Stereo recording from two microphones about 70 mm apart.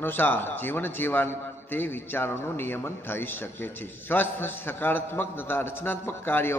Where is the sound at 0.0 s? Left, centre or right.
Left.